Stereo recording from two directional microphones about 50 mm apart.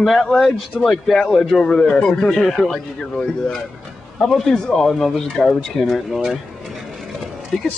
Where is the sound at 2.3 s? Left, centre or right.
Centre.